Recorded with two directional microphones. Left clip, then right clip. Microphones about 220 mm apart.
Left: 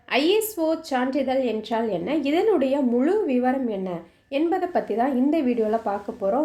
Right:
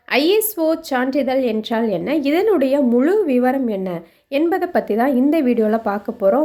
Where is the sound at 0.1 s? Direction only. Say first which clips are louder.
Right 5 dB; 25° right (ahead or behind).